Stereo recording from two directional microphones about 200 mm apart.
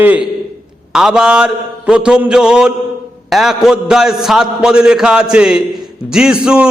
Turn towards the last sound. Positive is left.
turn(degrees=-5)  # may be behind; listen again after turning